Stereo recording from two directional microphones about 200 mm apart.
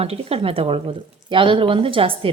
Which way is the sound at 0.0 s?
30° right (ahead or behind).